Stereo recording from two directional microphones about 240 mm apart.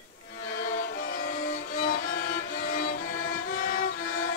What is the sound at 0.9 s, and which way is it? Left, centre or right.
Music, left.